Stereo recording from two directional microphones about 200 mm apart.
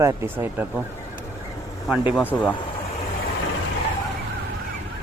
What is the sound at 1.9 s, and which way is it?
Speech, centre (ahead or behind).